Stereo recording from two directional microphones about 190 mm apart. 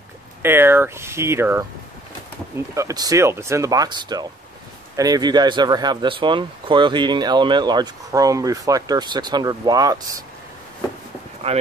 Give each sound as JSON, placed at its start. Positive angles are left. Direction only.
{"t": 0.4, "sound": "speech", "side_deg": -10}